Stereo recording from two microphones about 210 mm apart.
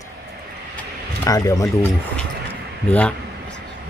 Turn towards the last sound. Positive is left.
turn(degrees=5)  # may be behind; listen again after turning